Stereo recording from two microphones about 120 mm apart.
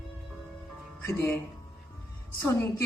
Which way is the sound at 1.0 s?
15° left (ahead or behind).